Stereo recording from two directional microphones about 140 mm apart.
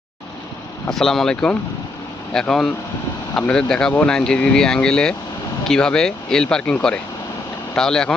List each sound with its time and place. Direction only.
0.9 s speech: centre (ahead or behind)
7.8 s speech: 5° left (ahead or behind)